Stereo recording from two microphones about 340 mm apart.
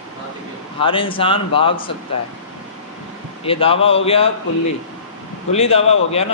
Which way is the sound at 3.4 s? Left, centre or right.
Centre.